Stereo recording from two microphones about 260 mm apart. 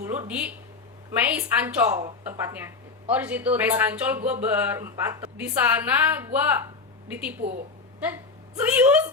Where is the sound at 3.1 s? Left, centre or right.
Centre.